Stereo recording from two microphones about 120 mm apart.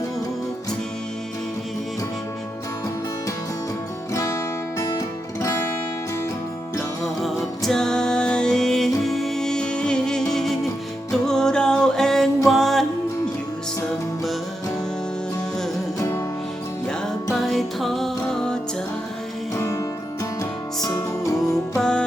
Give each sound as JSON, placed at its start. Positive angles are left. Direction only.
{"t": 4.1, "sound": "music", "side_deg": 25}
{"t": 7.0, "sound": "music", "side_deg": 0}
{"t": 16.0, "sound": "music", "side_deg": 25}
{"t": 17.3, "sound": "music", "side_deg": 0}
{"t": 19.5, "sound": "music", "side_deg": 25}
{"t": 20.8, "sound": "music", "side_deg": 30}
{"t": 21.8, "sound": "music", "side_deg": 5}